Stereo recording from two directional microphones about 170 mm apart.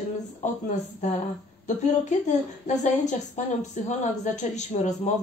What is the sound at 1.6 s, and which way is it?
A woman's voice, 45° left (ahead or behind).